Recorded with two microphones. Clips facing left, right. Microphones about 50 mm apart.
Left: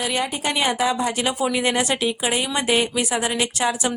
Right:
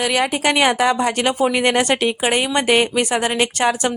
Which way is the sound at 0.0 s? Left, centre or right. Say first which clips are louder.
Right 6 dB; right.